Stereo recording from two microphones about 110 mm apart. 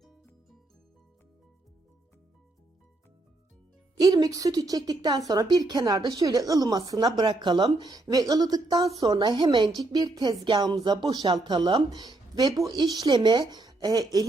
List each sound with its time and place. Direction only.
3.9 s speech: 35° right (ahead or behind)
9.1 s a woman's voice: 45° right (ahead or behind)